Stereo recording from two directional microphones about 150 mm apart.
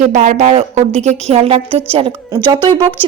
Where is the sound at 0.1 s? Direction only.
50° right (ahead or behind).